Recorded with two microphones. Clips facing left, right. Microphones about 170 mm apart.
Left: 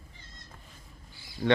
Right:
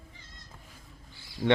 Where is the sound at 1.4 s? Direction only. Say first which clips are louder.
Even; 5° right (ahead or behind).